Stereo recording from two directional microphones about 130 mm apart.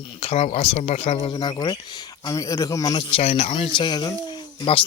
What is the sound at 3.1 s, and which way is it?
Speech, 55° left (ahead or behind).